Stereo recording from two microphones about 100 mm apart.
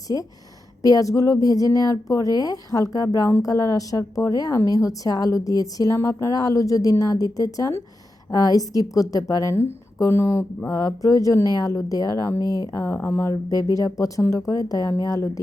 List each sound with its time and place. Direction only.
0.8 s a woman's voice: 35° left (ahead or behind)
12.8 s a woman's voice: 25° left (ahead or behind)